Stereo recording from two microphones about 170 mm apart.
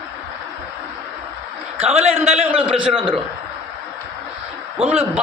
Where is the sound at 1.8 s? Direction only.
40° right (ahead or behind).